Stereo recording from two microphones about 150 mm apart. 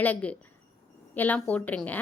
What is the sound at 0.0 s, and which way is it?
A woman's voice, 10° left (ahead or behind).